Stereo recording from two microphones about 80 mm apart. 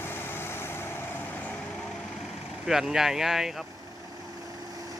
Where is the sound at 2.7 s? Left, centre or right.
Centre.